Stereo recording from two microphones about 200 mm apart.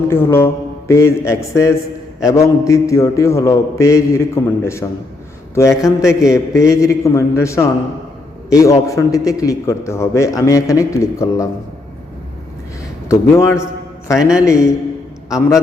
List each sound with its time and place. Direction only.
0.1 s a man's voice: 10° left (ahead or behind)
13.1 s a man's voice: 15° left (ahead or behind)
14.2 s a man's voice: 5° right (ahead or behind)
14.4 s a man's voice: 15° left (ahead or behind)